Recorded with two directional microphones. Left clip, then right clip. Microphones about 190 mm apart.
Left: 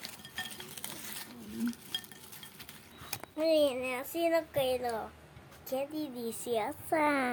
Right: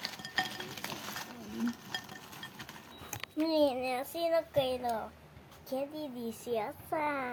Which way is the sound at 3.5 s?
15° left (ahead or behind).